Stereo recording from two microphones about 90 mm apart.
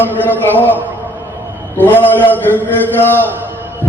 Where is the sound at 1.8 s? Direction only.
20° left (ahead or behind).